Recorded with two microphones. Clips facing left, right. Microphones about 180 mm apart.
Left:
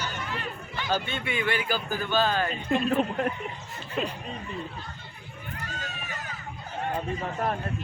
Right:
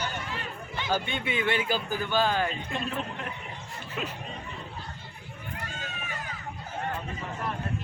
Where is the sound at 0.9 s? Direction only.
20° right (ahead or behind).